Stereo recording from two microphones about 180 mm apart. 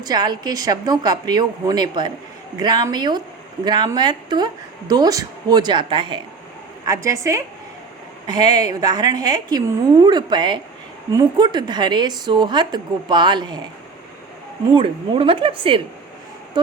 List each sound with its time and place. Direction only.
0.0 s a woman's voice: 20° right (ahead or behind)
14.8 s speech: 30° right (ahead or behind)